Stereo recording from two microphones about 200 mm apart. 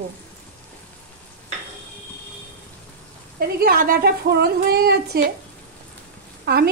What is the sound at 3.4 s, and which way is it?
Speech, 50° right (ahead or behind).